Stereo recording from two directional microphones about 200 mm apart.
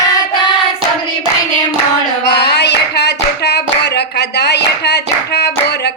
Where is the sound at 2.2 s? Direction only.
55° left (ahead or behind).